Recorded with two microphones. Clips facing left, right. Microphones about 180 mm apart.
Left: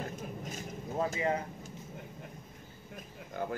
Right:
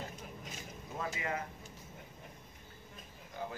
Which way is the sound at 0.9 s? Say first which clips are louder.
Left 7 dB; 30° left (ahead or behind).